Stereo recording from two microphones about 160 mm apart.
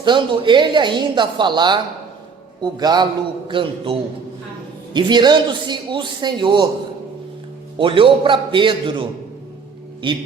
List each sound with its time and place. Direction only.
0.0 s a woman's voice: 30° right (ahead or behind)
4.9 s a woman's voice: 30° right (ahead or behind)
7.8 s a man's voice: 30° right (ahead or behind)